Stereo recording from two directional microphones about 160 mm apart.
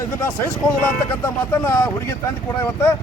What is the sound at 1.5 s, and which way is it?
Speech, 15° left (ahead or behind).